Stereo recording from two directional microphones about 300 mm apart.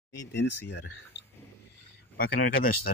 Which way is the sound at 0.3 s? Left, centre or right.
Left.